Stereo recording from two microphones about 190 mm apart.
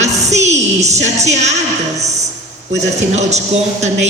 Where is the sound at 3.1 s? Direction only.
35° right (ahead or behind).